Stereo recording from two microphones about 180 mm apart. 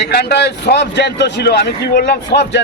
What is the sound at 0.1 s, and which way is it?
A man's voice, 65° left (ahead or behind).